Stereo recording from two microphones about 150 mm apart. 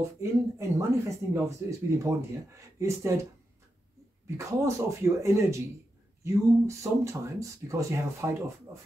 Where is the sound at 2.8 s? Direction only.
20° right (ahead or behind).